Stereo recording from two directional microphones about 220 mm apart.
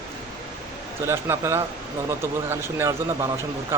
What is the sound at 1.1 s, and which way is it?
Speech, 10° right (ahead or behind).